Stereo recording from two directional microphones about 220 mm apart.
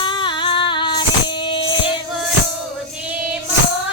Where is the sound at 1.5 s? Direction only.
20° left (ahead or behind).